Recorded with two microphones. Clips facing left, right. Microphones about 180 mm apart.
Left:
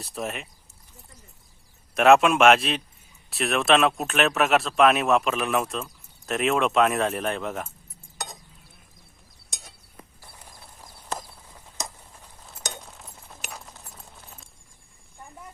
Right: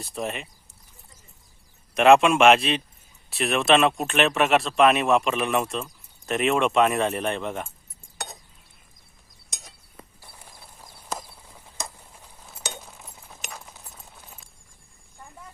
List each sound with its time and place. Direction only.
0.0 s speech: centre (ahead or behind)
2.0 s speech: centre (ahead or behind)
9.5 s chink: centre (ahead or behind)
11.2 s a sound: 10° right (ahead or behind)